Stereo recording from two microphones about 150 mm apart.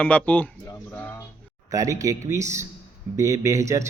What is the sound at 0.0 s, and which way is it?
Speech, 10° left (ahead or behind).